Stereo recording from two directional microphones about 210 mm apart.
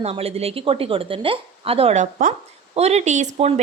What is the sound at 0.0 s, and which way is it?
A woman's voice, 30° right (ahead or behind).